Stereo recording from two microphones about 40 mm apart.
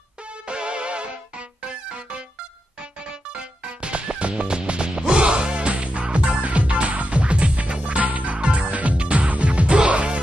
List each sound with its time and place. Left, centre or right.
0.5 s music: right
8.4 s music: right
8.6 s music: right